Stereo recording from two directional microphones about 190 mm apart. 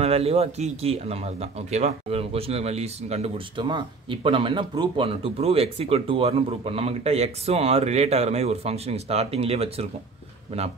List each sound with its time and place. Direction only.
0.0 s speech: 30° right (ahead or behind)